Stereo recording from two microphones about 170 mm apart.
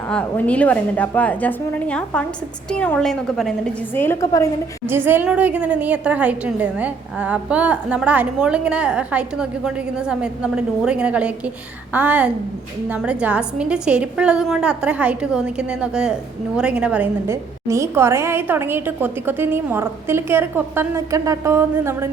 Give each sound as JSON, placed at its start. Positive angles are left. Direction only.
{"t": 0.1, "sound": "a woman's voice", "side_deg": 5}
{"t": 3.9, "sound": "a woman's voice", "side_deg": 15}
{"t": 4.9, "sound": "a woman's voice", "side_deg": -10}